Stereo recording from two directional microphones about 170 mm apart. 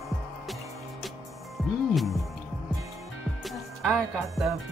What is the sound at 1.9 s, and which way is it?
Speech, centre (ahead or behind).